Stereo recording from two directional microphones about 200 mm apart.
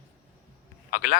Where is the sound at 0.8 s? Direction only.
45° left (ahead or behind).